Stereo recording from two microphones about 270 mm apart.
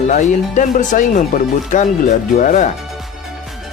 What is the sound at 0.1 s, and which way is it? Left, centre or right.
Speech, left.